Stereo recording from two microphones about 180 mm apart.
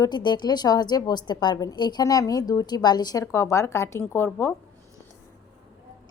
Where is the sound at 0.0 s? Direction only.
25° left (ahead or behind).